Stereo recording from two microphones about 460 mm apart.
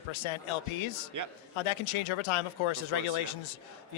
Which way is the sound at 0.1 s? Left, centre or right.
Left.